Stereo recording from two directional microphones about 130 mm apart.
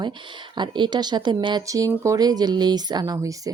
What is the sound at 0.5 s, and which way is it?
Speech, 35° right (ahead or behind).